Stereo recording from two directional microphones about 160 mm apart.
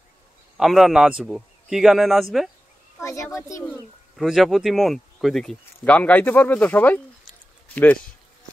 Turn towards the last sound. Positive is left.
turn(degrees=10)  # may be behind; listen again after turning